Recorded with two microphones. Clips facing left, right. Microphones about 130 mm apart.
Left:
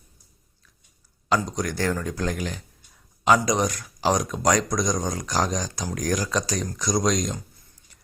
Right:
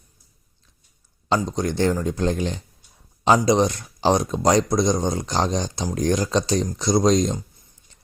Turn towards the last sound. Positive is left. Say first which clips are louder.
# right 6 dB
turn(degrees=-30)  # may be behind; listen again after turning